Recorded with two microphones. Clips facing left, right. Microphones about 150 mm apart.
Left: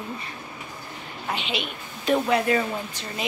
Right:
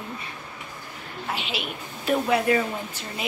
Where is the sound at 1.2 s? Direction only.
5° right (ahead or behind).